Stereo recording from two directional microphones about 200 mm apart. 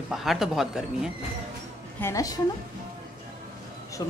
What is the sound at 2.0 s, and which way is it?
Speech, 15° left (ahead or behind).